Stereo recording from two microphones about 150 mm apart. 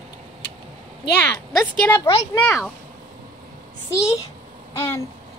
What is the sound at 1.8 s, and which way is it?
Speech, 15° left (ahead or behind).